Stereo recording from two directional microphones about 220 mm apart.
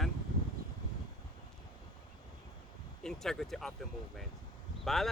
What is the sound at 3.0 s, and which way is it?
Speech, centre (ahead or behind).